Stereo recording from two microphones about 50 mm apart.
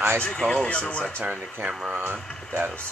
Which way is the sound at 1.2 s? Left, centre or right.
Right.